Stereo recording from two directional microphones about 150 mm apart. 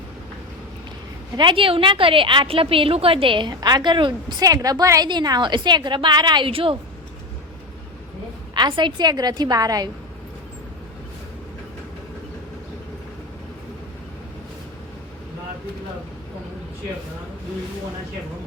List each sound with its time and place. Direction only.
1.4 s a woman's voice: 35° right (ahead or behind)
8.5 s a woman's voice: 30° right (ahead or behind)